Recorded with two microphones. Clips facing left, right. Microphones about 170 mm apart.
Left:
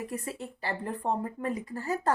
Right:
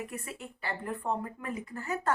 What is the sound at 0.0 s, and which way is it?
Speech, 35° left (ahead or behind).